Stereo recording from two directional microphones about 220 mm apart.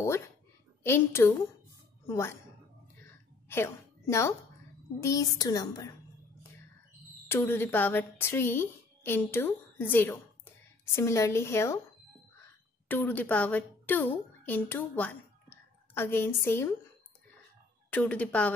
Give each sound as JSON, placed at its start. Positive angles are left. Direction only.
{"t": 0.8, "sound": "speech", "side_deg": 10}
{"t": 3.4, "sound": "a woman's voice", "side_deg": 10}
{"t": 7.2, "sound": "a woman's voice", "side_deg": 10}
{"t": 12.8, "sound": "a woman's voice", "side_deg": 10}
{"t": 17.8, "sound": "speech", "side_deg": 5}